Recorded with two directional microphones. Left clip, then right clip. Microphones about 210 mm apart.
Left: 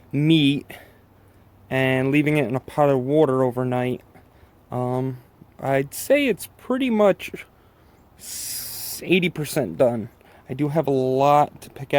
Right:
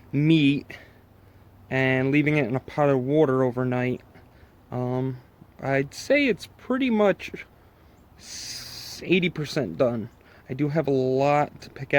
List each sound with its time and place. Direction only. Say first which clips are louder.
0.1 s speech: left 2 dB; 15° left (ahead or behind)